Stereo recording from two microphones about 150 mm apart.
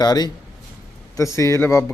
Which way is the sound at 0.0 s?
25° left (ahead or behind).